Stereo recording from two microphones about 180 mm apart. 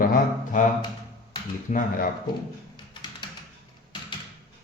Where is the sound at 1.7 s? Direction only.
50° left (ahead or behind).